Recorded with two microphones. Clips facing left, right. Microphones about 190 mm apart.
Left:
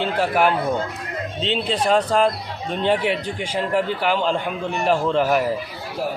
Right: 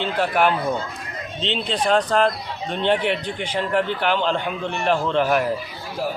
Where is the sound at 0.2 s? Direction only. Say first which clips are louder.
Even; 5° left (ahead or behind).